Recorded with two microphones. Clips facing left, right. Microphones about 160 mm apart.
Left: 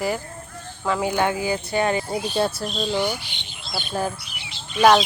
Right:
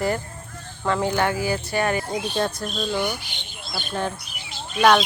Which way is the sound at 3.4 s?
50° right (ahead or behind).